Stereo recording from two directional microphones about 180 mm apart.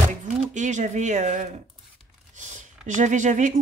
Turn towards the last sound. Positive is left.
turn(degrees=-45)  # may be behind; listen again after turning